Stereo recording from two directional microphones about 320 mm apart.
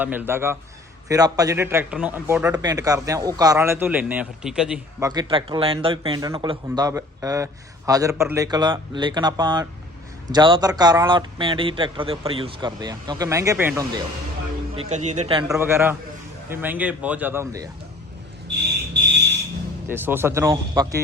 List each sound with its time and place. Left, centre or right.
0.0 s speech: centre
14.8 s speech: right
19.9 s speech: centre